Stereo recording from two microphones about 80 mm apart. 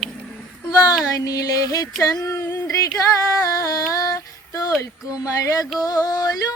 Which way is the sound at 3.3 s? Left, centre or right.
Left.